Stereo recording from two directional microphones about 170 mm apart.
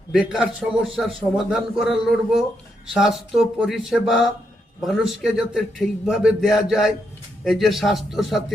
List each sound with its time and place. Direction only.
0.1 s a man's voice: 5° right (ahead or behind)